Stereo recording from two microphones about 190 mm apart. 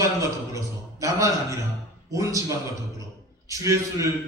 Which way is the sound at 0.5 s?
15° right (ahead or behind).